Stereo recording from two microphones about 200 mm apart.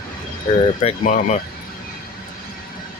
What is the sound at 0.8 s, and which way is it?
Speech, 35° left (ahead or behind).